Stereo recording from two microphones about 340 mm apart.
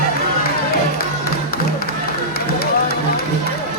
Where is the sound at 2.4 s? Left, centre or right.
Left.